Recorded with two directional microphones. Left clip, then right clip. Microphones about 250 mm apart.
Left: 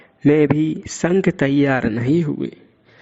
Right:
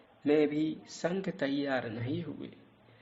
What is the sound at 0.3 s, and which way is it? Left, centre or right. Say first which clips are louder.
A man's voice: left 12 dB; left.